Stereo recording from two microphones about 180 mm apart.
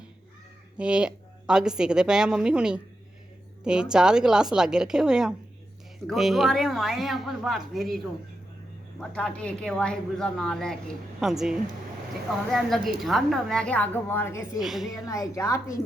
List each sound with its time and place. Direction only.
0.8 s a woman's voice: 5° right (ahead or behind); by 14.6 s 15° left (ahead or behind)
14.6 s speech: centre (ahead or behind)
14.9 s a woman's voice: 20° left (ahead or behind)